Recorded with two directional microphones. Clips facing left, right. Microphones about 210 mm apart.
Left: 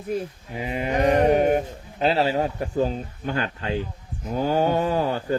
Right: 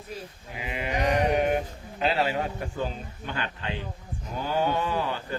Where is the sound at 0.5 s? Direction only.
40° left (ahead or behind).